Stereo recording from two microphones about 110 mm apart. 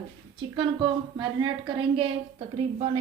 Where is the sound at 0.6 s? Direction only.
45° right (ahead or behind).